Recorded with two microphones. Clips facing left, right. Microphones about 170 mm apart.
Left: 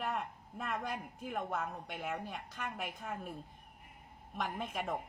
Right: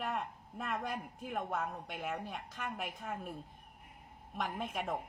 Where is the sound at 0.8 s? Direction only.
Centre (ahead or behind).